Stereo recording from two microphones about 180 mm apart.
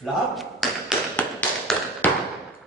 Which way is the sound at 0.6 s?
Centre (ahead or behind).